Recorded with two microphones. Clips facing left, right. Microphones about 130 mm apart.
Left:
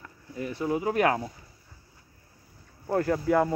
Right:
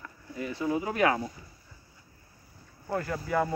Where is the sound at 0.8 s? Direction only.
45° left (ahead or behind).